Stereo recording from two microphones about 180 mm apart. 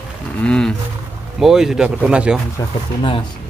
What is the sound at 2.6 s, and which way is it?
Speech, 20° left (ahead or behind).